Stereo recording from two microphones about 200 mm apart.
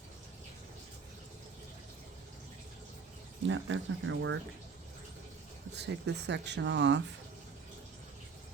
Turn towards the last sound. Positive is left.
turn(degrees=-65)  # may be behind; listen again after turning